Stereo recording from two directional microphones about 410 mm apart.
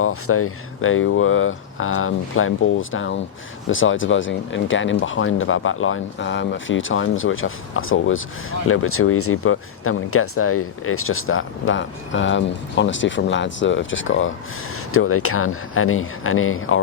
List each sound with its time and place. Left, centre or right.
0.0 s speech: left